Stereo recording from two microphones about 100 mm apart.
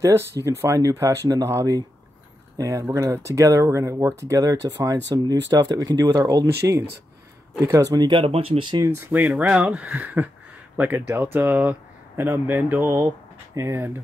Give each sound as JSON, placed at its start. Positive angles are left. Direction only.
{"t": 0.0, "sound": "speech", "side_deg": -30}
{"t": 9.2, "sound": "speech", "side_deg": -10}